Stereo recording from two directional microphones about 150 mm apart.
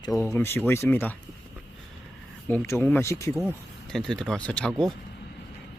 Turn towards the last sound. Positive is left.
turn(degrees=5)  # may be behind; listen again after turning